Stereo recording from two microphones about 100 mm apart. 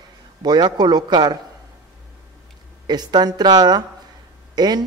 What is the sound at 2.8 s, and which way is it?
A man's voice, 45° right (ahead or behind).